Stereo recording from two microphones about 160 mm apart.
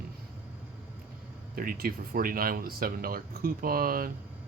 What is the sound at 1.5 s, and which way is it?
Speech, 65° right (ahead or behind).